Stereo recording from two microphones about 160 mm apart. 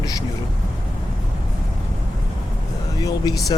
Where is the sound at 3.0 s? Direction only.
25° left (ahead or behind).